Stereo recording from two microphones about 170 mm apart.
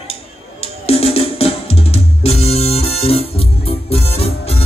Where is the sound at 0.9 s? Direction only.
35° left (ahead or behind).